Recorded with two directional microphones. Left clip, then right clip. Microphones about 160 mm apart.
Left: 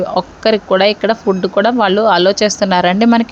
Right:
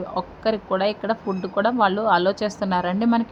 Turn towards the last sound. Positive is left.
turn(degrees=40)  # may be behind; listen again after turning